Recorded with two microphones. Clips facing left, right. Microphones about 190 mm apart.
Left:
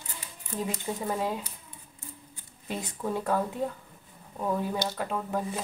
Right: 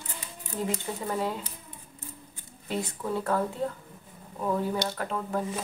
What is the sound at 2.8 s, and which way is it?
Speech, 15° left (ahead or behind).